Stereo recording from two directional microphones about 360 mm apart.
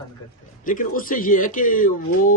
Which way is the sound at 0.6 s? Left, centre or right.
Left.